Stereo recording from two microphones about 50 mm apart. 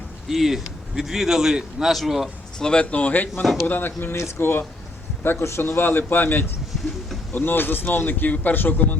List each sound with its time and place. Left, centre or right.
0.3 s a man's voice: centre
2.6 s speech: centre
2.9 s a man's voice: left
4.1 s a man's voice: left
6.7 s a sound: centre
7.3 s a man's voice: left